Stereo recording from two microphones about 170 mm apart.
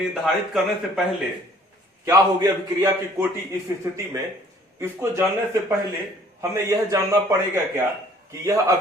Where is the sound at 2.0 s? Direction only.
20° right (ahead or behind).